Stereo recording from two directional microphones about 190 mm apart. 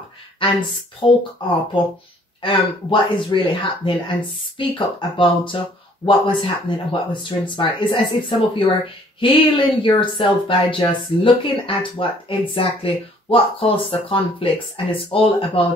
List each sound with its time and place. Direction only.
1.0 s speech: 25° left (ahead or behind)
2.4 s speech: 25° left (ahead or behind)